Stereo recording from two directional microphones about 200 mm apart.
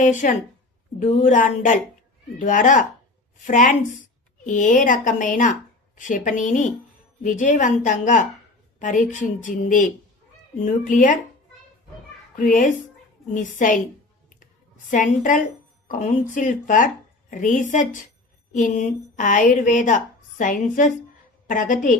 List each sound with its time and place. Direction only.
0.0 s a woman's voice: 40° left (ahead or behind)
12.4 s a woman's voice: 40° left (ahead or behind)
14.8 s a woman's voice: 40° left (ahead or behind)